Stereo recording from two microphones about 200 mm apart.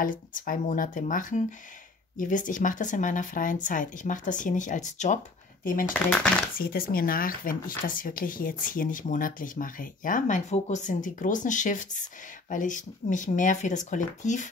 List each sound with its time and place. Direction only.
0.0 s speech: 40° left (ahead or behind)
6.0 s speech: 5° left (ahead or behind)
6.5 s speech: 50° left (ahead or behind)